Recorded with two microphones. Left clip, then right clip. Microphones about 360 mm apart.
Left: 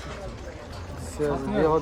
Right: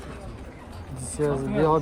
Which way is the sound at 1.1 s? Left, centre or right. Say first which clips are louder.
Right 1 dB; right.